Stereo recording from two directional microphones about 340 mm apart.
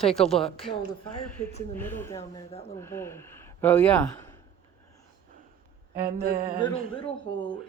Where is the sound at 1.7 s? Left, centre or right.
Centre.